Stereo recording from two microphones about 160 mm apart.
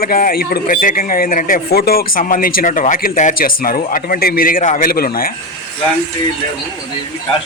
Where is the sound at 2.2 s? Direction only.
55° left (ahead or behind).